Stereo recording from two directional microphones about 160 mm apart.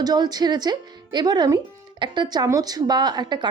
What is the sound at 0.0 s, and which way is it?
Speech, 25° right (ahead or behind).